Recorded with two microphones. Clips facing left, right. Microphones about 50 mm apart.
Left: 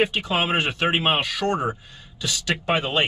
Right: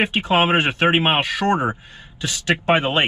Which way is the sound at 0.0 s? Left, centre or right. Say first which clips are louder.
Right 4 dB; right.